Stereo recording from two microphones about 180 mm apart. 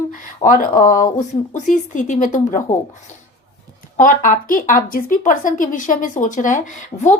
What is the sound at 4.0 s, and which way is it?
Speech, 50° left (ahead or behind).